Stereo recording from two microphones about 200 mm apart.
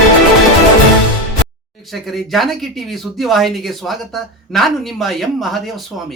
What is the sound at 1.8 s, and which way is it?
Speech, centre (ahead or behind).